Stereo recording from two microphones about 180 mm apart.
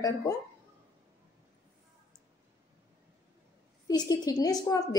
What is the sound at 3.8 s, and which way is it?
A woman's voice, 20° left (ahead or behind).